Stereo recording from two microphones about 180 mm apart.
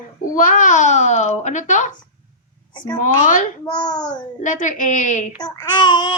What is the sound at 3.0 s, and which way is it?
Speech, 45° left (ahead or behind).